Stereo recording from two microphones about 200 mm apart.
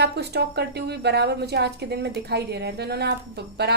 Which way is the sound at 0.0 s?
55° right (ahead or behind).